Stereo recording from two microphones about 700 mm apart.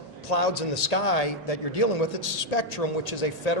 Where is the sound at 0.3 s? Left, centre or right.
Left.